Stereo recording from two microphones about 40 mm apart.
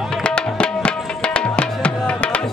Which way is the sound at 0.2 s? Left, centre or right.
Left.